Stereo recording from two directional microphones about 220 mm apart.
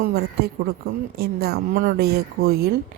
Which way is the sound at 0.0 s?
45° right (ahead or behind).